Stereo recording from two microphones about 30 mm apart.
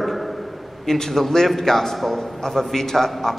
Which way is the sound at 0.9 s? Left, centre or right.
Centre.